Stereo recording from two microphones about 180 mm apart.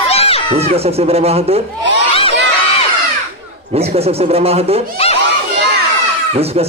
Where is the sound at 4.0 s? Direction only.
35° right (ahead or behind).